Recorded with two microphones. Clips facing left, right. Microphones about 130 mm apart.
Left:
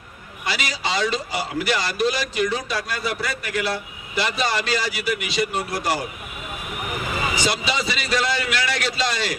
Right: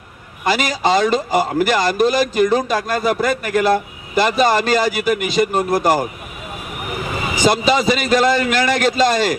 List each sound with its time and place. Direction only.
0.4 s a man's voice: 45° right (ahead or behind)
7.4 s a man's voice: 45° right (ahead or behind)